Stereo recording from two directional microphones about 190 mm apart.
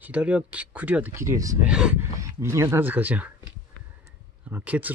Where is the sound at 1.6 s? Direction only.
5° right (ahead or behind).